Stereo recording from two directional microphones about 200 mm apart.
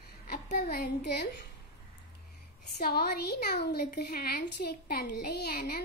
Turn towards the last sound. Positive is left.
turn(degrees=50)  # may be behind; listen again after turning